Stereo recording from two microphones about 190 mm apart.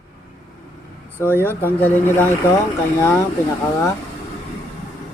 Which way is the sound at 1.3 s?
10° left (ahead or behind).